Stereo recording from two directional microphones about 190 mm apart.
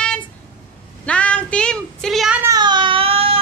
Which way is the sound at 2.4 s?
20° right (ahead or behind).